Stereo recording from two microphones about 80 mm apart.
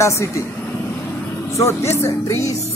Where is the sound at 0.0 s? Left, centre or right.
Left.